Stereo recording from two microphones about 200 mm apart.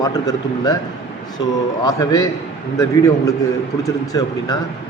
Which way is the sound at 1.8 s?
20° left (ahead or behind).